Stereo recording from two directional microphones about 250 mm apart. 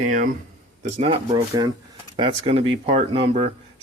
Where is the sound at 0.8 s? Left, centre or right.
Right.